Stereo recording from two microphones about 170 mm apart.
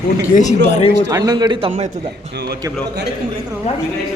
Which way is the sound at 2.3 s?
75° right (ahead or behind).